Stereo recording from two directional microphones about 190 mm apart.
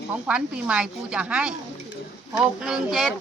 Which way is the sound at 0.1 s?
5° right (ahead or behind).